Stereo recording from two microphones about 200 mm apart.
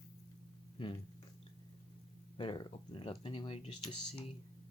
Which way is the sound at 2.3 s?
25° left (ahead or behind).